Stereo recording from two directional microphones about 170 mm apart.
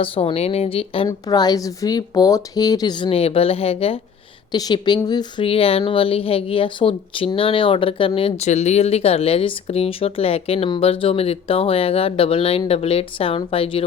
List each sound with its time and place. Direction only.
0.0 s speech: 30° left (ahead or behind)
1.0 s speech: 25° left (ahead or behind)